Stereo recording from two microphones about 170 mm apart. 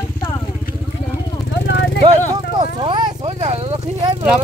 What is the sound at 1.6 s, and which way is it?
Vehicle, 85° left.